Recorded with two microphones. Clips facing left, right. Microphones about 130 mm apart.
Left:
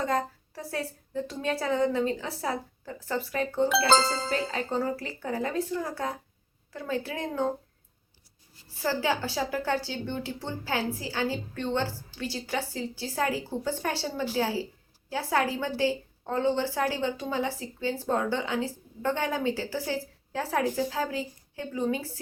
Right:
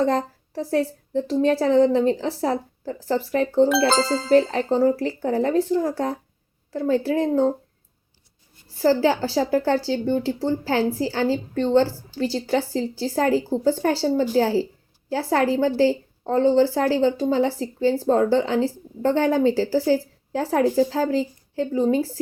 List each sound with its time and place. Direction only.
0.0 s a woman's voice: 30° right (ahead or behind)
3.8 s speech: centre (ahead or behind)
4.3 s speech: 30° right (ahead or behind)
8.8 s speech: 30° right (ahead or behind)